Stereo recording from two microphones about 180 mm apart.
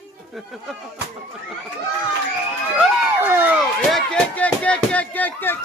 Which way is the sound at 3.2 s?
10° right (ahead or behind).